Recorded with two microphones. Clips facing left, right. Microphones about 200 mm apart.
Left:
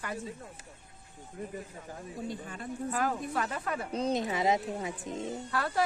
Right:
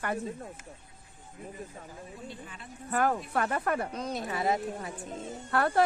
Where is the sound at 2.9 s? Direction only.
55° right (ahead or behind).